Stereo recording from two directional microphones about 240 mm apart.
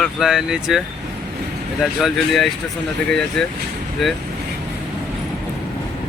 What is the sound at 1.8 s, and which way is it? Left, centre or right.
Speech, centre.